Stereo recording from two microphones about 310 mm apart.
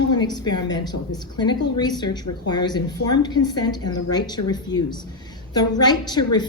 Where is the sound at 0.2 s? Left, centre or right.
Centre.